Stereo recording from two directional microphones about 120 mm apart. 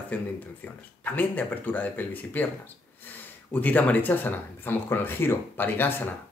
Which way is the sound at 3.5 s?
15° left (ahead or behind).